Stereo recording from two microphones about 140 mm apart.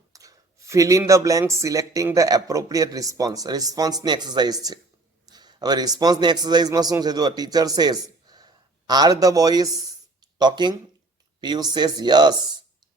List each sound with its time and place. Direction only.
0.1 s a man's voice: 25° right (ahead or behind)